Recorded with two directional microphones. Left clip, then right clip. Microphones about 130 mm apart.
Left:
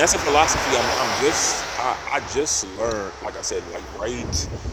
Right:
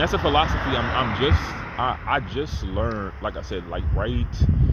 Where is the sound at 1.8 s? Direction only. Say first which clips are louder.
Right 3 dB; 30° left (ahead or behind).